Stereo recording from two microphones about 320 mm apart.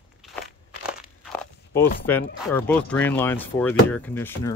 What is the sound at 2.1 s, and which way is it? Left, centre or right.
Speech, centre.